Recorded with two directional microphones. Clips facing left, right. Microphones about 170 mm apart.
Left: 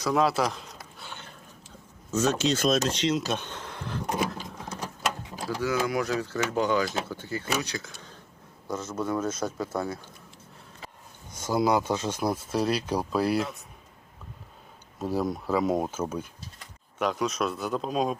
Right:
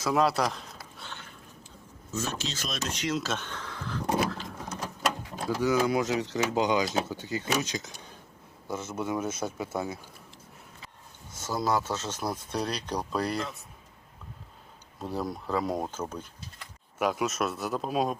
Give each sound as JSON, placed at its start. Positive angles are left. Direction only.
{"t": 0.0, "sound": "speech", "side_deg": 0}
{"t": 2.2, "sound": "speech", "side_deg": 60}
{"t": 3.1, "sound": "speech", "side_deg": 15}
{"t": 5.5, "sound": "speech", "side_deg": -15}
{"t": 11.4, "sound": "speech", "side_deg": 15}
{"t": 15.0, "sound": "speech", "side_deg": 0}
{"t": 17.0, "sound": "speech", "side_deg": -5}